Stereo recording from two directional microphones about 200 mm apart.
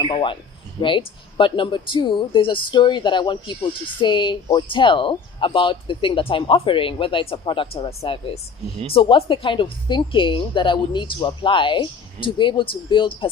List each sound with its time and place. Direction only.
0.0 s speech: 25° left (ahead or behind)